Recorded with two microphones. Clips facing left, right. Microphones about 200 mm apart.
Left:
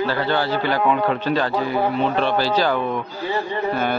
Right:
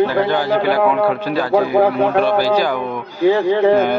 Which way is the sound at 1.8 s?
90° right.